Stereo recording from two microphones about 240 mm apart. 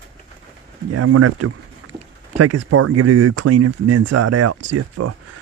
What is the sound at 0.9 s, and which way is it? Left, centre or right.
Speech, right.